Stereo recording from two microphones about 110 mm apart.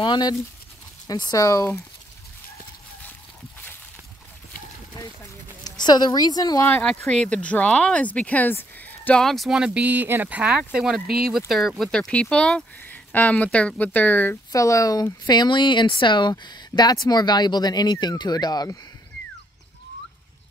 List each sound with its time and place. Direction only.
0.0 s speech: 40° left (ahead or behind)
5.6 s a woman's voice: 40° left (ahead or behind)
7.1 s speech: 10° left (ahead or behind)
9.2 s speech: centre (ahead or behind); by 14.4 s 15° left (ahead or behind)
14.5 s speech: 30° left (ahead or behind)